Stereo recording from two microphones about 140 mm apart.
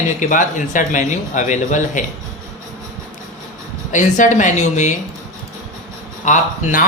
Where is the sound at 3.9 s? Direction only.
65° left (ahead or behind).